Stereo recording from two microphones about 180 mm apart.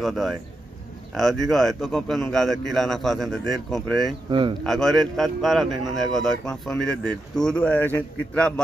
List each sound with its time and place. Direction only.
0.0 s speech: centre (ahead or behind)
4.3 s speech: 30° right (ahead or behind)
4.6 s speech: centre (ahead or behind)